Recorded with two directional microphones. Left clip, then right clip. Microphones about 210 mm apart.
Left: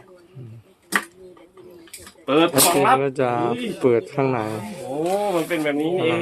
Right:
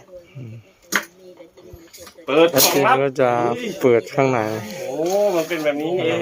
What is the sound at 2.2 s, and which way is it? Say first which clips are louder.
Speech: right 3 dB; 40° left (ahead or behind).